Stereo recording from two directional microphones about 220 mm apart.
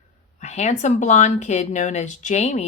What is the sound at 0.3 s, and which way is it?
Speech, 30° left (ahead or behind).